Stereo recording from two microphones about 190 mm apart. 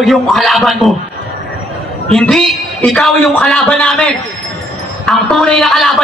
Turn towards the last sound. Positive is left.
turn(degrees=0)  # may be behind; listen again after turning